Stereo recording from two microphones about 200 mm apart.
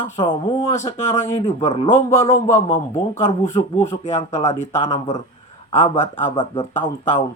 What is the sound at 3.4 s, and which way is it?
Speech, 10° left (ahead or behind).